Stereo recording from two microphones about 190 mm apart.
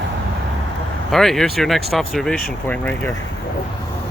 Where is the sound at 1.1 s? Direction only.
Centre (ahead or behind).